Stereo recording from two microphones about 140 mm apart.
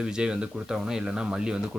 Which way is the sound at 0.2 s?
5° right (ahead or behind).